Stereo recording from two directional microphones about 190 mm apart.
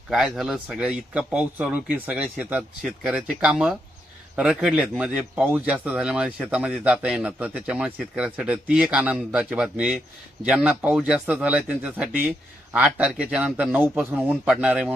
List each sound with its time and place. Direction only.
0.1 s speech: centre (ahead or behind)